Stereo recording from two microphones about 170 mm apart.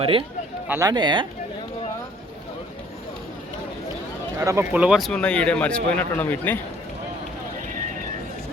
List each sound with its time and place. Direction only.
0.0 s speech: 30° right (ahead or behind)
0.7 s speech: 20° right (ahead or behind)
4.4 s speech: 15° right (ahead or behind); by 6.6 s 10° left (ahead or behind)